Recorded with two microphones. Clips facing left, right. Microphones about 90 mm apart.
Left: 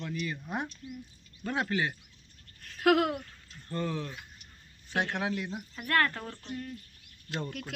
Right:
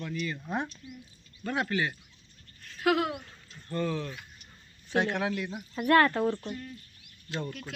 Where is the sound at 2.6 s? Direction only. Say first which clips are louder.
Left 2 dB; 55° left (ahead or behind).